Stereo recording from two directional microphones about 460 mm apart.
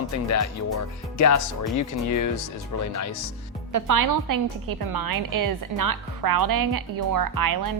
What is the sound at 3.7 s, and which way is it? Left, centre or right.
A woman's voice, right.